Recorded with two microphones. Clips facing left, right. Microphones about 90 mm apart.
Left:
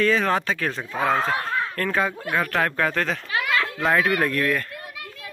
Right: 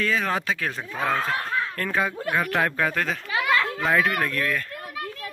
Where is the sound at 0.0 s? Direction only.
5° right (ahead or behind).